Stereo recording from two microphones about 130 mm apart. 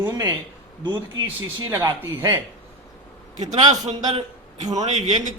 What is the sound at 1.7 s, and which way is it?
Speech, 20° right (ahead or behind).